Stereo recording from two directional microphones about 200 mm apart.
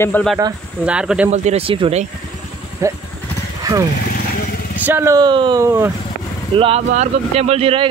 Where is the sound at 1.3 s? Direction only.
35° right (ahead or behind).